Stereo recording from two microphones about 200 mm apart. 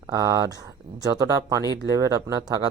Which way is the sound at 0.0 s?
15° right (ahead or behind).